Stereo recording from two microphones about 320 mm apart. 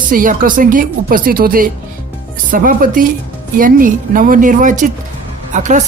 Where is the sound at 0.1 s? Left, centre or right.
Right.